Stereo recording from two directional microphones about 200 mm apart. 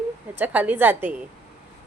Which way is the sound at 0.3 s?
10° right (ahead or behind).